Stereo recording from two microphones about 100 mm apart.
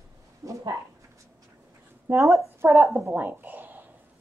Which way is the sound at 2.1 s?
20° right (ahead or behind).